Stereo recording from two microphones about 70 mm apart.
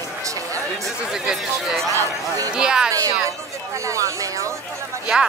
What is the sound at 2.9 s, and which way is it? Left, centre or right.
A woman's voice, right.